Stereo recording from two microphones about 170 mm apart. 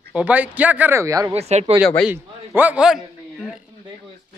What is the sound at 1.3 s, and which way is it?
Speech, 40° right (ahead or behind).